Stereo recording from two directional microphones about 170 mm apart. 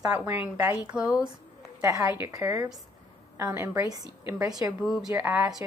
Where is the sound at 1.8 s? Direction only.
20° right (ahead or behind).